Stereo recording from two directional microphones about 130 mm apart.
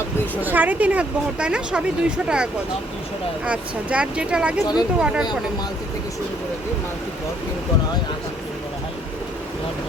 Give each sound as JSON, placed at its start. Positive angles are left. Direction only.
{"t": 0.4, "sound": "speech", "side_deg": -15}
{"t": 4.6, "sound": "speech", "side_deg": 30}
{"t": 4.9, "sound": "speech", "side_deg": -5}